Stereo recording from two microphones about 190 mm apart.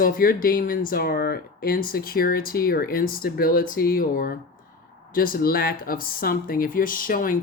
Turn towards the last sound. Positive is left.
turn(degrees=45)  # may be behind; listen again after turning